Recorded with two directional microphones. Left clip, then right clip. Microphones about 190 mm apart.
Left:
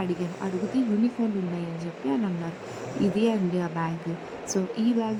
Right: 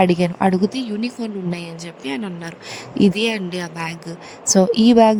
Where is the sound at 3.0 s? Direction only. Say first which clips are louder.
Right 7 dB; 50° right (ahead or behind).